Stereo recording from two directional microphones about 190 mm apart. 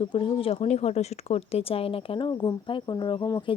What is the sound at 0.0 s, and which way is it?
Speech, 25° left (ahead or behind).